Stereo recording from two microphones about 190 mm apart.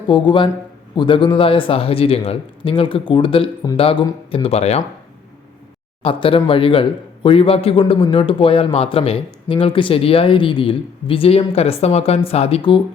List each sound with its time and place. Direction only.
0.1 s a man's voice: 25° left (ahead or behind)
6.0 s a man's voice: 30° left (ahead or behind)